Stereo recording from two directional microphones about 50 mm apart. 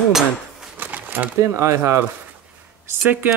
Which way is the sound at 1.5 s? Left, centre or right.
Right.